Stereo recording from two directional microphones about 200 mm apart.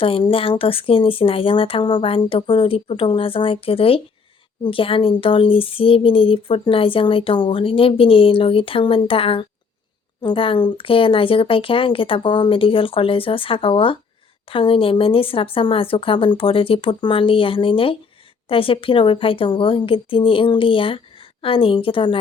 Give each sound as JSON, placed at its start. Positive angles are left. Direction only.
{"t": 0.0, "sound": "speech", "side_deg": 25}